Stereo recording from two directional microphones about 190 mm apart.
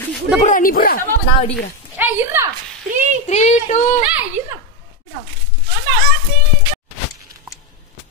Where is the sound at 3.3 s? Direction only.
35° left (ahead or behind).